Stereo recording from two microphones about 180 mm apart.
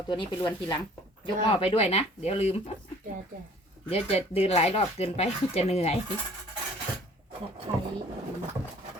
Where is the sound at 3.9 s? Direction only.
35° left (ahead or behind).